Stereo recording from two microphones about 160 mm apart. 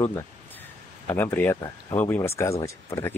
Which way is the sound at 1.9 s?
15° left (ahead or behind).